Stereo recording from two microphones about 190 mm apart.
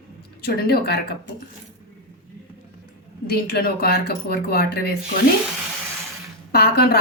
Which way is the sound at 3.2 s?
55° left (ahead or behind).